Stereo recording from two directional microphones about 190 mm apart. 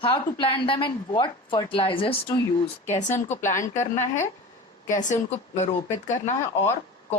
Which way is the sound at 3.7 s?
40° left (ahead or behind).